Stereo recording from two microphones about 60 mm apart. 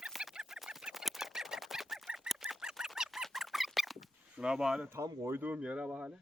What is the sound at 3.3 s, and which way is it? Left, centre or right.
Squeak, centre.